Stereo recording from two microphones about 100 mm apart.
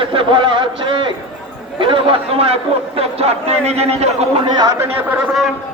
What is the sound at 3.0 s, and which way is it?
A man's voice, 90° right.